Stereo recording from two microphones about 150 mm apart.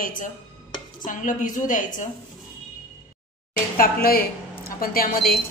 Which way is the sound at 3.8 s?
85° left.